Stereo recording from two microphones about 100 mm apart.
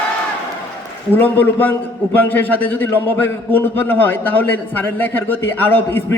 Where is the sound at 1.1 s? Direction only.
20° left (ahead or behind).